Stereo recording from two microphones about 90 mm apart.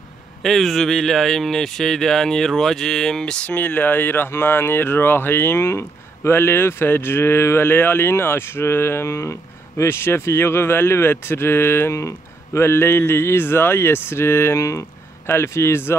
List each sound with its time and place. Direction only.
0.4 s speech: centre (ahead or behind); by 16.0 s 25° left (ahead or behind)